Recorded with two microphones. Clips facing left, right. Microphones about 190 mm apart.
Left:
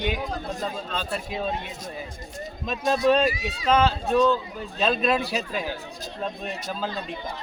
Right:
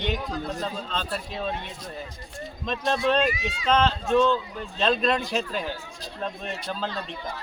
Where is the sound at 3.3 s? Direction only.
35° left (ahead or behind).